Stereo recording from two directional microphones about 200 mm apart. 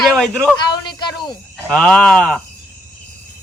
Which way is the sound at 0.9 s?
20° left (ahead or behind).